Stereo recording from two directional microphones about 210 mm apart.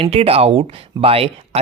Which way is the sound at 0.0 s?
30° right (ahead or behind).